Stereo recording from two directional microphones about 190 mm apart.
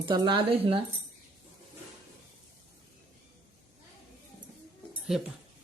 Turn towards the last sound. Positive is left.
turn(degrees=0)  # may be behind; listen again after turning